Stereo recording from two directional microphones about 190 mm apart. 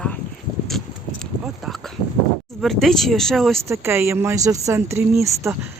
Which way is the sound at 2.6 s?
Centre (ahead or behind).